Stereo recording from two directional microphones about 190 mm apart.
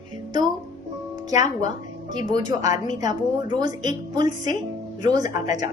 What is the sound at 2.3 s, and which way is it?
Speech, 20° right (ahead or behind).